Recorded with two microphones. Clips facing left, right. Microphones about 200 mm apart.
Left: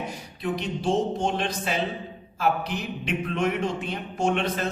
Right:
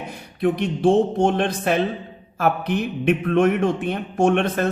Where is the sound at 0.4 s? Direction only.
55° right (ahead or behind).